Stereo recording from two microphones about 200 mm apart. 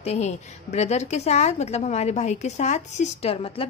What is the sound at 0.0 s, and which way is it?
Speech, 35° left (ahead or behind).